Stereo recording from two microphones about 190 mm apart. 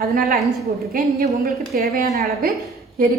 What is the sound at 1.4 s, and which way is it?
A woman's voice, 50° right (ahead or behind).